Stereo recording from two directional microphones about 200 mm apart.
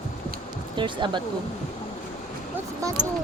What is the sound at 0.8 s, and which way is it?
Speech, 25° right (ahead or behind).